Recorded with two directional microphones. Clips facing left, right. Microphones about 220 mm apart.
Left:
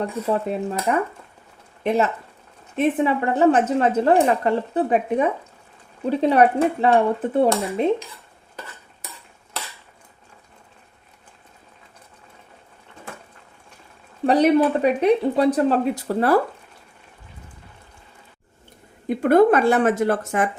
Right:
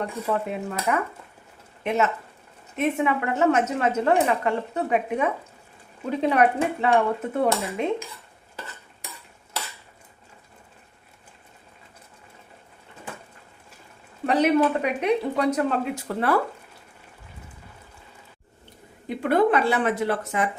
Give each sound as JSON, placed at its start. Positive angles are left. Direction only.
{"t": 0.0, "sound": "a woman's voice", "side_deg": 35}
{"t": 14.3, "sound": "a woman's voice", "side_deg": 35}
{"t": 19.0, "sound": "speech", "side_deg": 45}